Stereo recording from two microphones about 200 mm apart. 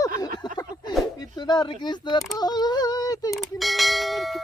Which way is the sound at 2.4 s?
20° left (ahead or behind).